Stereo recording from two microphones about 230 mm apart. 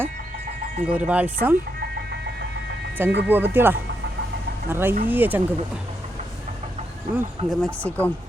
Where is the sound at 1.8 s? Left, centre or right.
Right.